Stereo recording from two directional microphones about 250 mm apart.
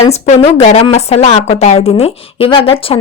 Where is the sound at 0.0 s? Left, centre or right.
Left.